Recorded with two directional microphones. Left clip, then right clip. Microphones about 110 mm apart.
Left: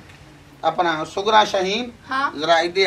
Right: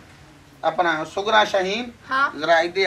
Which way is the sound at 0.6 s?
5° left (ahead or behind).